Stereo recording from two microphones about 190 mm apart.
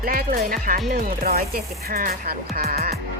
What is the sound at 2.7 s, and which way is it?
Music, 55° right (ahead or behind).